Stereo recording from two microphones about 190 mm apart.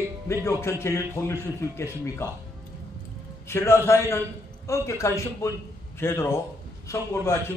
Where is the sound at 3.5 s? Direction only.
15° left (ahead or behind).